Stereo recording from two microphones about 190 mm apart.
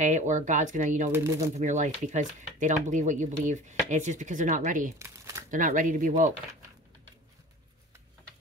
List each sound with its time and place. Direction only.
0.0 s speech: 40° right (ahead or behind)
1.1 s speech: 15° right (ahead or behind)
1.6 s speech: 40° right (ahead or behind)
4.9 s crumpling: 15° right (ahead or behind)
5.5 s speech: 45° right (ahead or behind)